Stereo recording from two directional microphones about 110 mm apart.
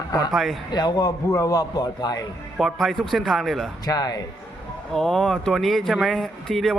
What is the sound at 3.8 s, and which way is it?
Speech, 35° left (ahead or behind).